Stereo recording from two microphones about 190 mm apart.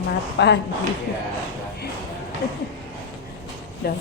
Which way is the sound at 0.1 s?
60° left (ahead or behind).